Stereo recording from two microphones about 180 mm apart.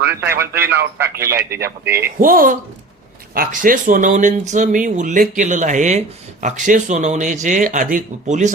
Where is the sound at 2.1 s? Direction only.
50° right (ahead or behind).